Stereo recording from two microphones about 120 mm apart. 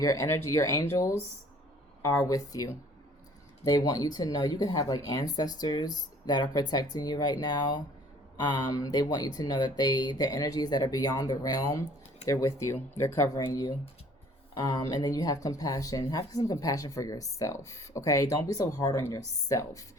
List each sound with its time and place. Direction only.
0.0 s speech: 25° left (ahead or behind)